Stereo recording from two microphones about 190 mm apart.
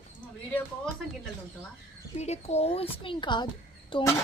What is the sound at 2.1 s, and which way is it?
A child's voice, 35° left (ahead or behind).